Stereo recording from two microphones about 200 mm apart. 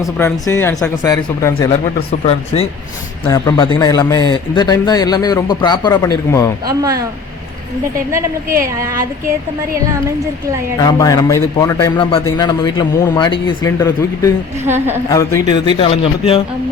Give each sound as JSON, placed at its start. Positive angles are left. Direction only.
{"t": 0.0, "sound": "a man's voice", "side_deg": 15}
{"t": 1.5, "sound": "a man's voice", "side_deg": 25}
{"t": 3.2, "sound": "a man's voice", "side_deg": 20}
{"t": 8.1, "sound": "a woman's voice", "side_deg": -15}
{"t": 10.8, "sound": "a man's voice", "side_deg": 20}
{"t": 14.6, "sound": "a woman's voice", "side_deg": -10}
{"t": 15.1, "sound": "a man's voice", "side_deg": 15}
{"t": 15.8, "sound": "a man's voice", "side_deg": 30}